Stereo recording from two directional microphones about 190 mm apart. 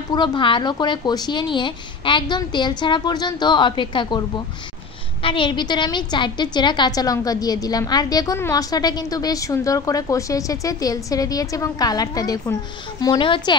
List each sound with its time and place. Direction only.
0.1 s a woman's voice: 25° left (ahead or behind)
5.2 s a woman's voice: 25° left (ahead or behind)